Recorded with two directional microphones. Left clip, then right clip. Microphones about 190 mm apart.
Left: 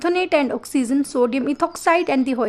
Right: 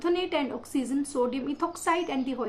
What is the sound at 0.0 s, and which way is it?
A woman's voice, 60° left (ahead or behind).